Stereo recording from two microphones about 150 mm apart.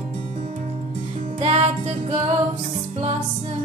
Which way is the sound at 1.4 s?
45° right (ahead or behind).